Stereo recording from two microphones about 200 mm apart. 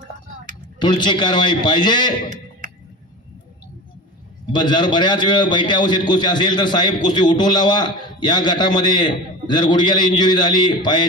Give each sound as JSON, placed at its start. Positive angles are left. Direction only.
{"t": 0.7, "sound": "a man's voice", "side_deg": 20}
{"t": 4.5, "sound": "a man's voice", "side_deg": 20}